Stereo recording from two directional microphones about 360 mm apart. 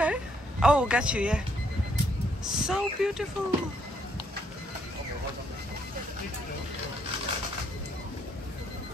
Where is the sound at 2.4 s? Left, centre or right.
Centre.